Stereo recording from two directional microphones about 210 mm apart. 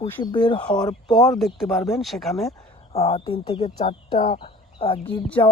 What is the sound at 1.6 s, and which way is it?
Speech, centre (ahead or behind).